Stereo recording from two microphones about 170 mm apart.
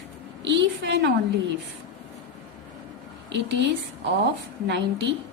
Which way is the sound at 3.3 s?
90° right.